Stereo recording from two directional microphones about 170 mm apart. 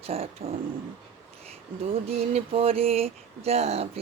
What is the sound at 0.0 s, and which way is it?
Speech, 35° right (ahead or behind).